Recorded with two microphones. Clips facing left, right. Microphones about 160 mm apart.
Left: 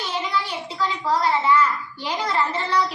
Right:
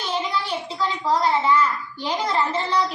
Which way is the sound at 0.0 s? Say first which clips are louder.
Even; 20° right (ahead or behind).